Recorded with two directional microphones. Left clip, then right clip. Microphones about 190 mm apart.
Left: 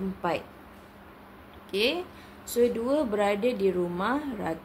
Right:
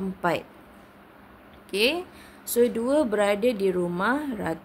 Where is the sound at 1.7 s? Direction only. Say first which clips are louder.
Right 3 dB; 40° right (ahead or behind).